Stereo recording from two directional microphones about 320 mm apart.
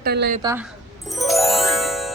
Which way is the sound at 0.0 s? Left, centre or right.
Right.